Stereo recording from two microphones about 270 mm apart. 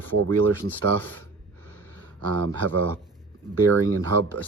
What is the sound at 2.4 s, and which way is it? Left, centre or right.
Speech, right.